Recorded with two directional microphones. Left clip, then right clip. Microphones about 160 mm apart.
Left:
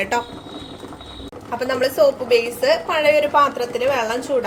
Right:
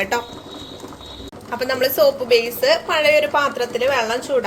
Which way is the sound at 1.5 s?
Centre (ahead or behind).